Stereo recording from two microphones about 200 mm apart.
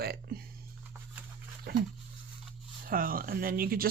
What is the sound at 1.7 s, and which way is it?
Speech, 50° right (ahead or behind).